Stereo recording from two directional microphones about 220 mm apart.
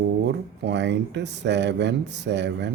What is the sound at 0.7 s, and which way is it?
Speech, 50° right (ahead or behind).